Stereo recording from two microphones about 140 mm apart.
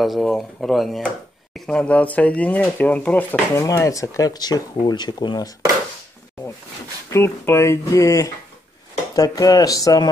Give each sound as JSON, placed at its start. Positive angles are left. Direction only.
{"t": 0.0, "sound": "speech", "side_deg": 0}
{"t": 7.1, "sound": "speech", "side_deg": 20}